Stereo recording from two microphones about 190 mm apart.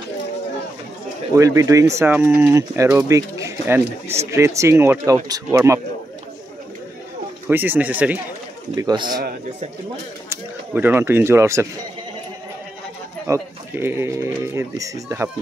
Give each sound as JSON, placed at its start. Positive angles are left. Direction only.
{"t": 1.3, "sound": "speech", "side_deg": -15}
{"t": 7.4, "sound": "speech", "side_deg": -10}
{"t": 8.7, "sound": "speech", "side_deg": -20}
{"t": 10.7, "sound": "speech", "side_deg": -10}
{"t": 13.3, "sound": "speech", "side_deg": -10}